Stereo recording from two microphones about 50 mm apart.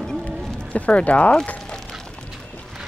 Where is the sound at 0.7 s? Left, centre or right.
Left.